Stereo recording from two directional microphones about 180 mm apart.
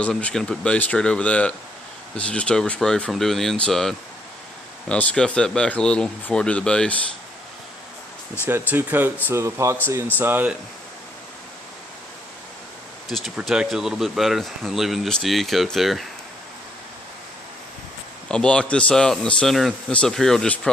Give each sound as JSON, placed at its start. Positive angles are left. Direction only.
{"t": 0.0, "sound": "speech", "side_deg": 5}
{"t": 8.4, "sound": "speech", "side_deg": -10}
{"t": 13.1, "sound": "speech", "side_deg": 0}
{"t": 18.3, "sound": "speech", "side_deg": 5}